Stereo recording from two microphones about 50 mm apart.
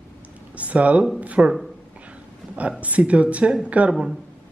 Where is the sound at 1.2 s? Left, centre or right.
Right.